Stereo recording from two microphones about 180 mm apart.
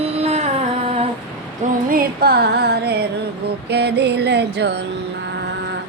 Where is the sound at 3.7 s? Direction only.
70° right (ahead or behind).